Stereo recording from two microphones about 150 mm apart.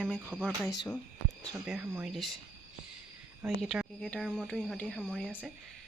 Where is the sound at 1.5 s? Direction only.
5° right (ahead or behind).